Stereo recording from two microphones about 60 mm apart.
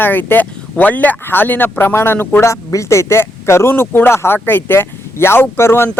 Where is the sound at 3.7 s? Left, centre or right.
Left.